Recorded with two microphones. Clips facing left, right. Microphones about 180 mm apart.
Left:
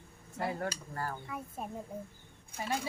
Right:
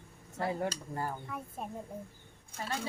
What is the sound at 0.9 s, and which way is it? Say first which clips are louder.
Speech: right 2 dB; 20° right (ahead or behind).